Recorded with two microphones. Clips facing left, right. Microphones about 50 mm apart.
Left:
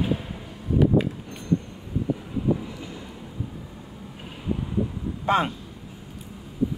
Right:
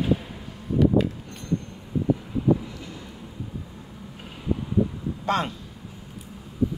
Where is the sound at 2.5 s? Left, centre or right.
Centre.